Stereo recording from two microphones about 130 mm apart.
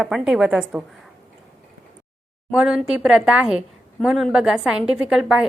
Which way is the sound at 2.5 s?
10° right (ahead or behind).